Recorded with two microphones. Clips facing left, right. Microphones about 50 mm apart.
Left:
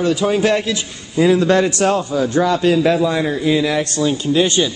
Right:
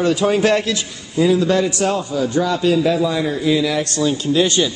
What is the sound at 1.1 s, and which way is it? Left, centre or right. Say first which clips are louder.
A man's voice: left 2 dB; left.